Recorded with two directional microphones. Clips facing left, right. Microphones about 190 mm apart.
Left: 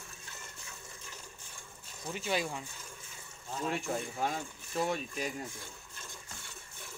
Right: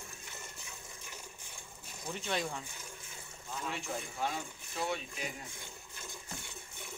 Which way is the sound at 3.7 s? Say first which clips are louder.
Left 6 dB; 45° left (ahead or behind).